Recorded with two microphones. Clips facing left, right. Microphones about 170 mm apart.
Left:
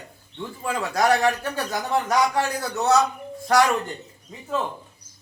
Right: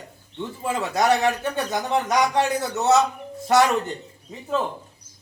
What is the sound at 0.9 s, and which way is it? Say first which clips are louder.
Speech: even; centre (ahead or behind).